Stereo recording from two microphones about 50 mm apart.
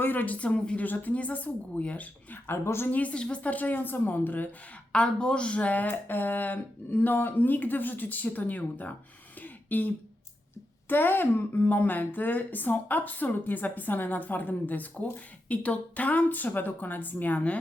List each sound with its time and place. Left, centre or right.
0.0 s speech: left
0.8 s a woman's voice: left
2.5 s a woman's voice: left
2.9 s a woman's voice: left
4.9 s a woman's voice: centre; by 9.0 s left
9.4 s throat clearing: left
10.8 s a woman's voice: left